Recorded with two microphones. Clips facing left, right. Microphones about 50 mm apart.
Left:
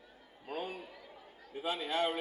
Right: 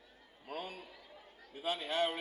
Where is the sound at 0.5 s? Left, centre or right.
Left.